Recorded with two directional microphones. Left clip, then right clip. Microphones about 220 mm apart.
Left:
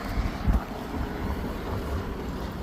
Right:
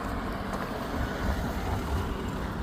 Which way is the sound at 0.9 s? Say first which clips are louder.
Right 1 dB; 50° right (ahead or behind).